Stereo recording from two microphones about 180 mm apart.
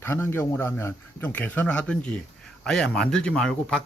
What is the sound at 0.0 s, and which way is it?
A man's voice, 15° left (ahead or behind).